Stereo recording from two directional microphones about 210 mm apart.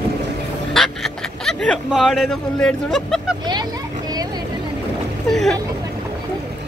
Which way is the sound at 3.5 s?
20° right (ahead or behind).